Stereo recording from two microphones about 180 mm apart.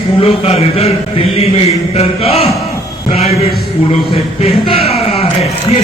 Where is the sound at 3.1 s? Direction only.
35° left (ahead or behind).